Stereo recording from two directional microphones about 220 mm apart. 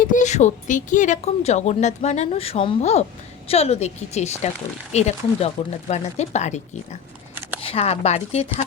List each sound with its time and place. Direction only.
0.0 s speech: 35° left (ahead or behind)
7.6 s speech: 25° left (ahead or behind)